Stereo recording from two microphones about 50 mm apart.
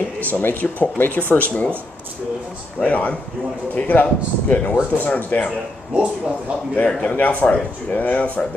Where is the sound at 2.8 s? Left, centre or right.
Left.